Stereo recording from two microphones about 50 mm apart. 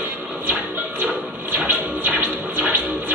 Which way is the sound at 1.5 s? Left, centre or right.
Right.